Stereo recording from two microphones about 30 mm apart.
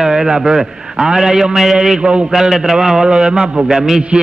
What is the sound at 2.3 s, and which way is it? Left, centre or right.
Speech, centre.